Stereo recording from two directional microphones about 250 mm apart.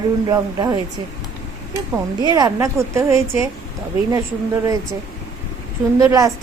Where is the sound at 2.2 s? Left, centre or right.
Centre.